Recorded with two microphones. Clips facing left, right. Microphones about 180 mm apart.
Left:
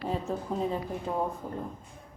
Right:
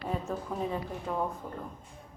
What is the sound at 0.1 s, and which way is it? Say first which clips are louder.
Speech: left 2 dB; 25° left (ahead or behind).